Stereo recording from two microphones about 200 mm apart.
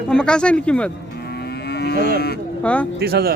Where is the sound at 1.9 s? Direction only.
45° right (ahead or behind).